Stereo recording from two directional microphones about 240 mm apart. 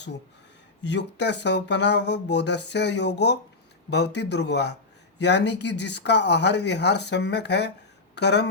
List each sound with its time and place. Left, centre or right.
0.8 s speech: left